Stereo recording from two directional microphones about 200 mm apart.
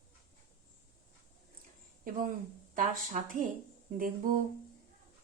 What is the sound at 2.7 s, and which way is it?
A woman's voice, 40° right (ahead or behind).